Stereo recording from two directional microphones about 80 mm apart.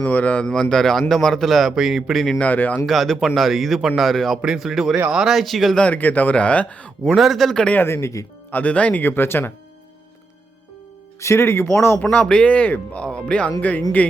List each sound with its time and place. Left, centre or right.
0.0 s a man's voice: centre
2.4 s speech: left
2.8 s a man's voice: centre
5.7 s speech: centre
7.0 s a man's voice: centre
7.8 s speech: left
8.4 s speech: left
11.2 s speech: left
12.1 s speech: centre